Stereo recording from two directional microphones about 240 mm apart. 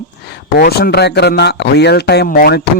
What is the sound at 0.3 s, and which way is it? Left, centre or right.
Speech, left.